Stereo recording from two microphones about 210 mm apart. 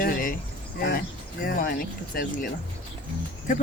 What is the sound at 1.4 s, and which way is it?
Speech, 45° left (ahead or behind).